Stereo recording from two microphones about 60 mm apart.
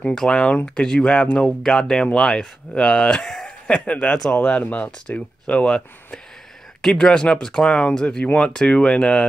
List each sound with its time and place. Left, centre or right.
0.1 s speech: centre
1.6 s speech: centre
6.8 s speech: centre